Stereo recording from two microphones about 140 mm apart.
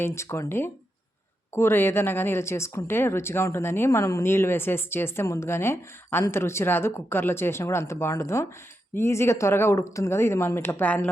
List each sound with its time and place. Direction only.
0.0 s speech: 20° left (ahead or behind)